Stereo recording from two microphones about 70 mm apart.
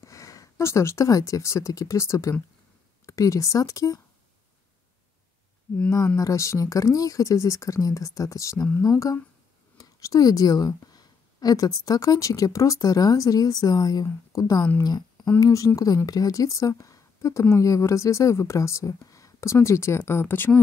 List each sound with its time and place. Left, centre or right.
0.0 s speech: left
6.1 s speech: left
14.8 s speech: left
15.4 s speech: left